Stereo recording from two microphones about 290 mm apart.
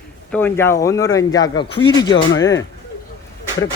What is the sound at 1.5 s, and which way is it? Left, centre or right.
Speech, left.